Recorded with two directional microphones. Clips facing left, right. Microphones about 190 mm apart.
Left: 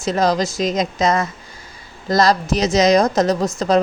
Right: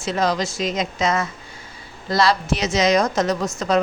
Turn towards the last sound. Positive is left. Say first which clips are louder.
# left 4 dB
turn(degrees=35)  # may be behind; listen again after turning